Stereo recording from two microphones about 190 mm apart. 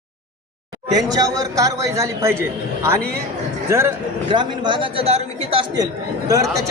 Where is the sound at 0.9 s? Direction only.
20° right (ahead or behind).